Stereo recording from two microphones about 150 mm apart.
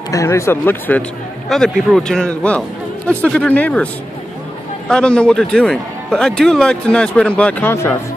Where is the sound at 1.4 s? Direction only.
5° left (ahead or behind).